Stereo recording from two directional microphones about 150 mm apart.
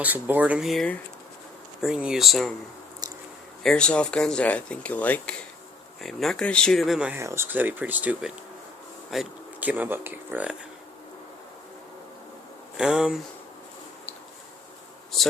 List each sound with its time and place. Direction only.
0.0 s speech: 10° right (ahead or behind)
3.0 s a sound: 25° right (ahead or behind)
3.6 s speech: 5° left (ahead or behind)
7.2 s speech: 15° right (ahead or behind)
12.7 s speech: 5° right (ahead or behind)